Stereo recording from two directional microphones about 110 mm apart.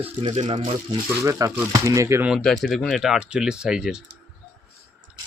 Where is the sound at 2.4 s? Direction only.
Centre (ahead or behind).